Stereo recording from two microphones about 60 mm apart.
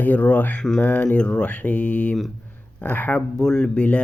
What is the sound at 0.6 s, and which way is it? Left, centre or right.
Speech, centre.